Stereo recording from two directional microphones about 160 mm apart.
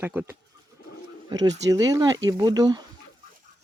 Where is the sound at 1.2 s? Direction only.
20° right (ahead or behind).